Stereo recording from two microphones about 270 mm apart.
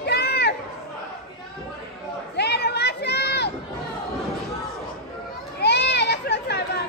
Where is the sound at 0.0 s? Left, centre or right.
Left.